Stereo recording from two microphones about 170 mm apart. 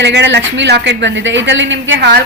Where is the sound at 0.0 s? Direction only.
90° right.